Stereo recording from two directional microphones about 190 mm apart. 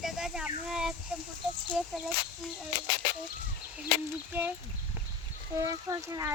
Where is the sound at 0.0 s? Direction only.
5° right (ahead or behind).